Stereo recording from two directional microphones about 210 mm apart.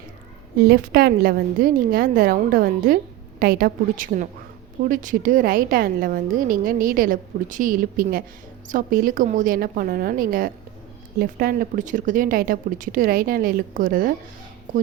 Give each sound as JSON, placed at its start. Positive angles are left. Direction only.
{"t": 0.6, "sound": "a woman's voice", "side_deg": -45}